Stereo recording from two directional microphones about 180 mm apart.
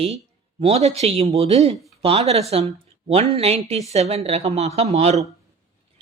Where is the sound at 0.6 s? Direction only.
35° right (ahead or behind).